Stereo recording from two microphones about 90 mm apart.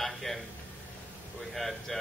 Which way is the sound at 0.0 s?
Centre (ahead or behind).